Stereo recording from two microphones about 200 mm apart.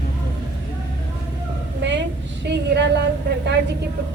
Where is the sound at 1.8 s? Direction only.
60° right (ahead or behind).